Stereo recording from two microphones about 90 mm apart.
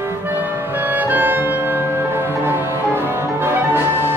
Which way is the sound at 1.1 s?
20° right (ahead or behind).